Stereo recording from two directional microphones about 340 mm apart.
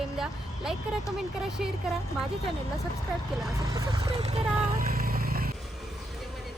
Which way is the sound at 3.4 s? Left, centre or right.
Centre.